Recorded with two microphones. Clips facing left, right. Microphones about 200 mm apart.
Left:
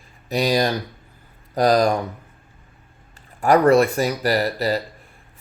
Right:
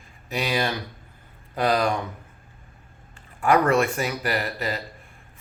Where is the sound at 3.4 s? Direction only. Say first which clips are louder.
Left 5 dB; 35° left (ahead or behind).